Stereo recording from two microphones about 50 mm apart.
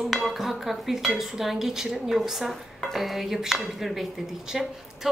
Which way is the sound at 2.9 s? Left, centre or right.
Centre.